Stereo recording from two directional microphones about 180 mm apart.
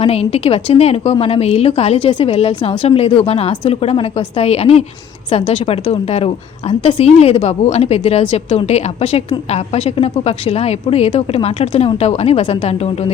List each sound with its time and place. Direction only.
0.0 s a woman's voice: 35° left (ahead or behind)